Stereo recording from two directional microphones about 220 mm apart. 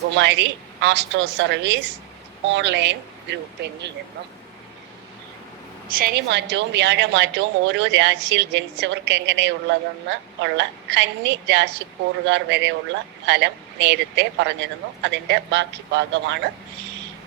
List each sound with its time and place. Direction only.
0.2 s a woman's voice: 50° right (ahead or behind)
5.9 s a woman's voice: 45° right (ahead or behind)